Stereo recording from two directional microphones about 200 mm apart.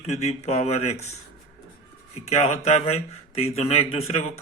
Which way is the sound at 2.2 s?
35° left (ahead or behind).